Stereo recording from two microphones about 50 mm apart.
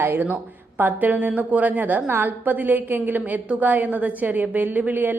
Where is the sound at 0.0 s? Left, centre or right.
Right.